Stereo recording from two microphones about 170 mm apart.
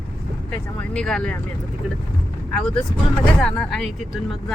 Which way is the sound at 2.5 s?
5° left (ahead or behind).